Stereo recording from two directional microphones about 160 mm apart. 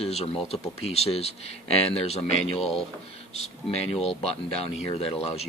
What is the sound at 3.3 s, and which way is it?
Speech, 40° left (ahead or behind).